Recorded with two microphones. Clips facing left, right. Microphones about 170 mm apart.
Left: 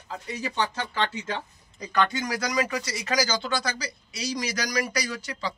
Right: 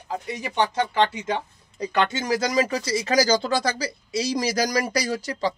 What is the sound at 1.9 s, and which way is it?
Speech, 25° right (ahead or behind).